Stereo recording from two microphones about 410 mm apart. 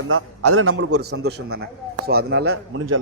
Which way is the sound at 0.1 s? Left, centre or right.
Right.